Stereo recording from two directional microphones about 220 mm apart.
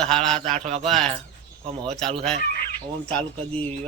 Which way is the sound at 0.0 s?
5° left (ahead or behind).